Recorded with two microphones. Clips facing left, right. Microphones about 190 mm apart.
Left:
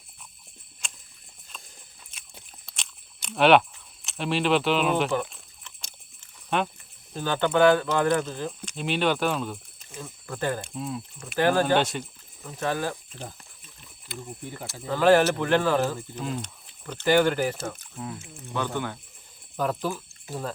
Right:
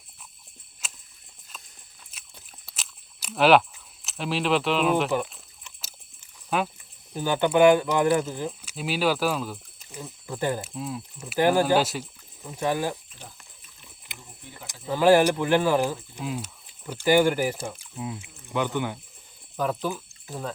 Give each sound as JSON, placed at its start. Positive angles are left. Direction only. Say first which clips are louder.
{"t": 0.8, "sound": "a sound", "louder": "even", "side_deg": -5}
{"t": 4.0, "sound": "speech", "louder": "left 1 dB", "side_deg": 0}
{"t": 5.1, "sound": "a sound", "louder": "right 1 dB", "side_deg": -10}
{"t": 6.5, "sound": "speech", "louder": "even", "side_deg": -5}
{"t": 10.8, "sound": "speech", "louder": "even", "side_deg": 0}
{"t": 11.3, "sound": "speech", "louder": "right 1 dB", "side_deg": -15}
{"t": 14.0, "sound": "a sound", "louder": "left 10 dB", "side_deg": -20}
{"t": 14.7, "sound": "speech", "louder": "right 1 dB", "side_deg": -10}
{"t": 19.5, "sound": "speech", "louder": "even", "side_deg": 0}